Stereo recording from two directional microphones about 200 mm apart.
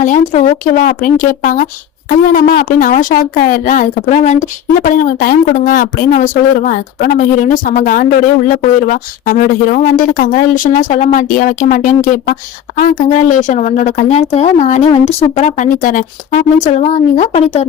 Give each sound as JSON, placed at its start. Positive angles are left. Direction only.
{"t": 0.0, "sound": "a woman's voice", "side_deg": 35}